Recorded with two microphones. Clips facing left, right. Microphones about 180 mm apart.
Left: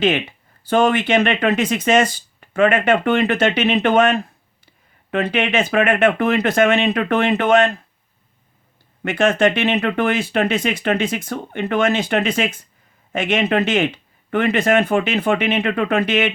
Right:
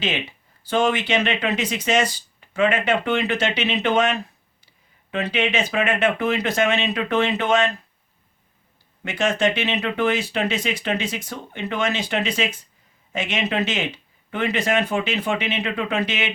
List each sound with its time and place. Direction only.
0.0 s speech: 50° left (ahead or behind)
9.0 s speech: 55° left (ahead or behind)